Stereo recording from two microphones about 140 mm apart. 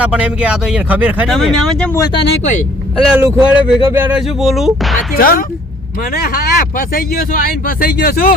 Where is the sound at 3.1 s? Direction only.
15° right (ahead or behind).